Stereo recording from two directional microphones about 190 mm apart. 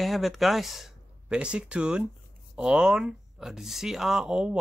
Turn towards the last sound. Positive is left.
turn(degrees=-5)  # may be behind; listen again after turning